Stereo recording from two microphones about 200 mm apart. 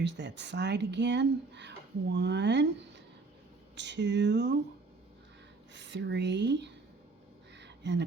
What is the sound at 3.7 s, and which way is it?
Speech, 60° right (ahead or behind).